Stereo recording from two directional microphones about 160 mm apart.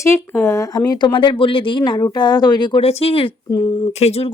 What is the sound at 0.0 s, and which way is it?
Speech, 15° left (ahead or behind).